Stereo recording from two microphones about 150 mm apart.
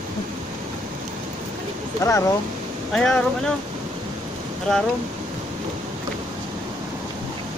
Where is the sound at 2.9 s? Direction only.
5° left (ahead or behind).